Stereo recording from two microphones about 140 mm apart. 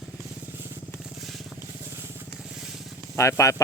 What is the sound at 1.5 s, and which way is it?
Vehicle, 20° right (ahead or behind).